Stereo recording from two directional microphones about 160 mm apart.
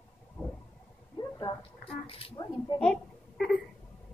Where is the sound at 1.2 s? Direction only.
25° left (ahead or behind).